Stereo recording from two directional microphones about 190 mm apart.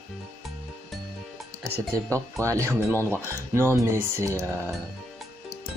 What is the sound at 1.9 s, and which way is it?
Speech, 15° right (ahead or behind).